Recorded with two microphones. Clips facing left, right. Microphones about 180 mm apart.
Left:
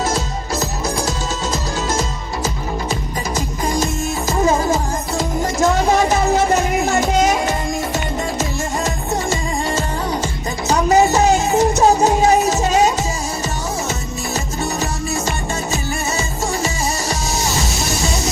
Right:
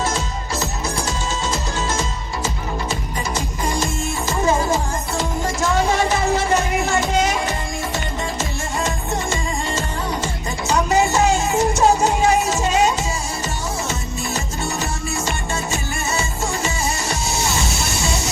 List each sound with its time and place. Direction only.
1.9 s music: 40° left (ahead or behind)
5.1 s music: 40° left (ahead or behind)
16.6 s music: 35° left (ahead or behind)